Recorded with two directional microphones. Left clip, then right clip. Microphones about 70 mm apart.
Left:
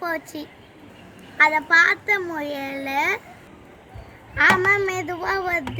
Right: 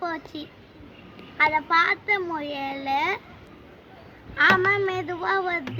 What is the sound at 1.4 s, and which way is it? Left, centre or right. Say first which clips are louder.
A child's voice: left 4 dB; centre.